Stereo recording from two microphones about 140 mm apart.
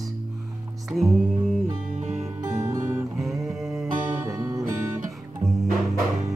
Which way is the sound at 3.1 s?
Centre (ahead or behind).